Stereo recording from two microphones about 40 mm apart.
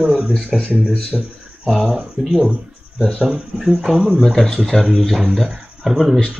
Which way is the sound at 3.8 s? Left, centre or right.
Centre.